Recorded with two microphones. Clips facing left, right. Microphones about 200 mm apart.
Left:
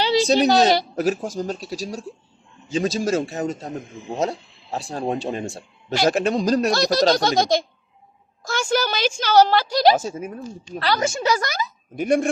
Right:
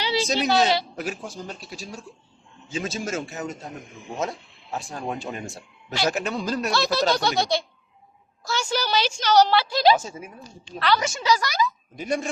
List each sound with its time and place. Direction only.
0.3 s a woman's voice: 40° left (ahead or behind)
11.0 s a woman's voice: 50° left (ahead or behind)